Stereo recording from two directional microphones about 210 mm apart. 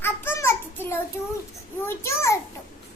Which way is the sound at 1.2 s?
10° left (ahead or behind).